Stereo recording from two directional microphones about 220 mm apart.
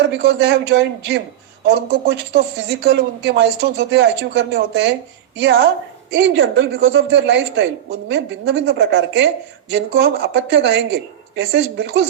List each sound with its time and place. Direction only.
0.0 s speech: 50° right (ahead or behind)